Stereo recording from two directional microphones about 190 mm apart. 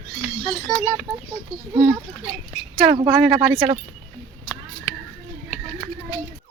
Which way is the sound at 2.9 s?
20° right (ahead or behind).